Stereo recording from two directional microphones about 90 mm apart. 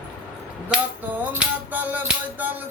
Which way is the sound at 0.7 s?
20° right (ahead or behind).